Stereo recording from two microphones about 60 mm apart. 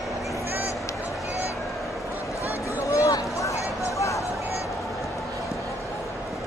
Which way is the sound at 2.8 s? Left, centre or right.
Left.